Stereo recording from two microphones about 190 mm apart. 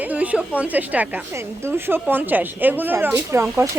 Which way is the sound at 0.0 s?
10° right (ahead or behind).